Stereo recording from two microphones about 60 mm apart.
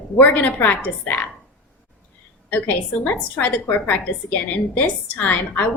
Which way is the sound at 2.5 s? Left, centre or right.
Left.